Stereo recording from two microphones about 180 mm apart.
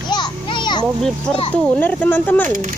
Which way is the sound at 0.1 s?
25° left (ahead or behind).